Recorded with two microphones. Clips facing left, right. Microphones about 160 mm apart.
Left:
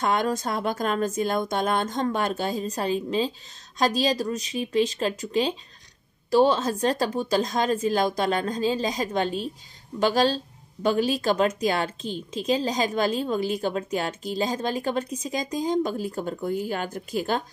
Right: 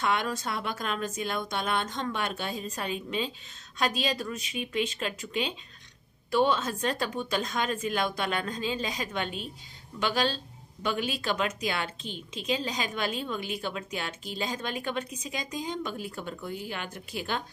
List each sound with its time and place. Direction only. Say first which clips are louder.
0.0 s a woman's voice: left 5 dB; 45° left (ahead or behind)